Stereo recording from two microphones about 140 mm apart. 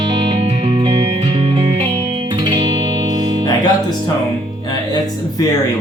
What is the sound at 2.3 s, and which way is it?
Music, 30° right (ahead or behind).